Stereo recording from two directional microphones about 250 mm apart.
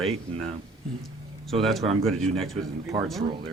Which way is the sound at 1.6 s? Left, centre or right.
Centre.